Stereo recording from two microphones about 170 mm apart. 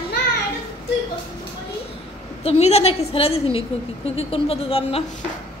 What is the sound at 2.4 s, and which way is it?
A woman's voice, 35° left (ahead or behind).